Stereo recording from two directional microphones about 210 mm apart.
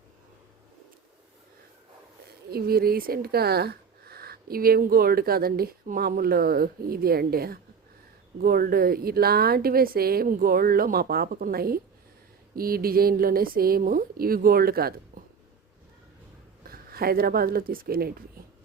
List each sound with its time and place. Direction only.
2.5 s speech: 45° right (ahead or behind)
16.6 s speech: 45° right (ahead or behind)